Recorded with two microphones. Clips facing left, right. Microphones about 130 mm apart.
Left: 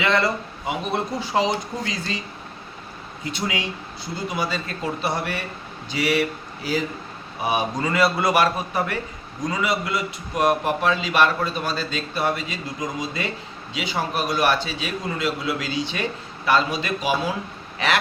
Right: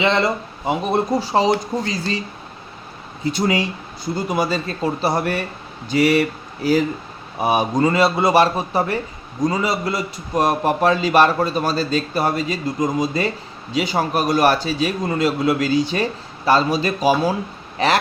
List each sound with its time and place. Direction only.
0.0 s a man's voice: 25° right (ahead or behind)
0.6 s a man's voice: 35° right (ahead or behind)
3.3 s a man's voice: 40° right (ahead or behind)